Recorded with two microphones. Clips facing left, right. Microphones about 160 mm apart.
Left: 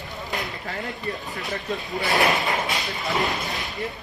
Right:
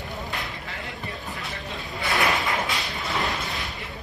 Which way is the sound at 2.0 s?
20° left (ahead or behind).